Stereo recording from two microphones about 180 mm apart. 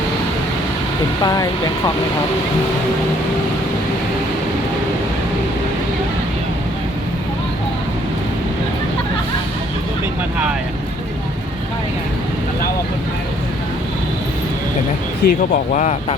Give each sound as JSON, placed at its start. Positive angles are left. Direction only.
{"t": 1.2, "sound": "speech", "side_deg": 20}
{"t": 15.2, "sound": "speech", "side_deg": 60}
{"t": 15.7, "sound": "speech", "side_deg": 40}